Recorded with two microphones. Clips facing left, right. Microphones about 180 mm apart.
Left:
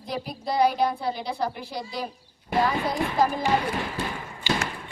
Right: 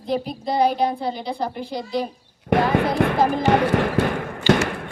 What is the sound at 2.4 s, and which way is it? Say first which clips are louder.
Basketball bounce: right 6 dB; 65° right (ahead or behind).